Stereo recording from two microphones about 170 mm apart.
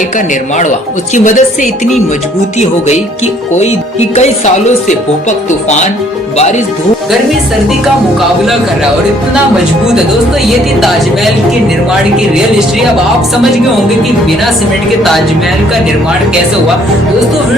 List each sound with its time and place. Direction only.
1.1 s music: 45° left (ahead or behind)
4.1 s music: 40° left (ahead or behind)